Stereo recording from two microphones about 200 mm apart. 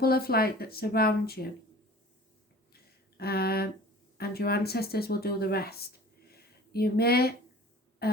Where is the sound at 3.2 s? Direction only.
50° left (ahead or behind).